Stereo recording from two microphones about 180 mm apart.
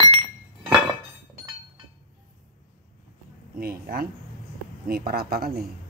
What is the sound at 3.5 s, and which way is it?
Speech, 55° right (ahead or behind).